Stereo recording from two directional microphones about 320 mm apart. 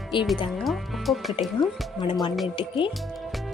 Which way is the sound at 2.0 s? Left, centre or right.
Centre.